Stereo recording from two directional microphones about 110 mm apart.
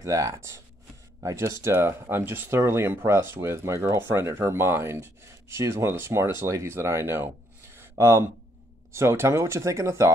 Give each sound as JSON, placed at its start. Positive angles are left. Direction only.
{"t": 0.0, "sound": "speech", "side_deg": -30}
{"t": 7.7, "sound": "a sound", "side_deg": -25}
{"t": 8.9, "sound": "speech", "side_deg": -25}